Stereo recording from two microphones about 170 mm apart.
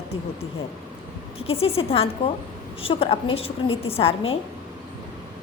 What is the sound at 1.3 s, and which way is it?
A woman's voice, 35° left (ahead or behind).